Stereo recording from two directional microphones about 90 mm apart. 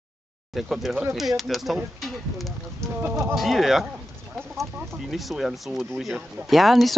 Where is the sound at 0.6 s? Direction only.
5° right (ahead or behind).